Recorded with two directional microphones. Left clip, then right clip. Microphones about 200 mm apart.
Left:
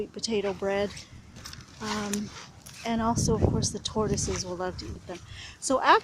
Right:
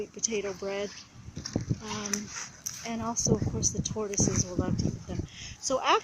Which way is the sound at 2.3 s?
10° left (ahead or behind).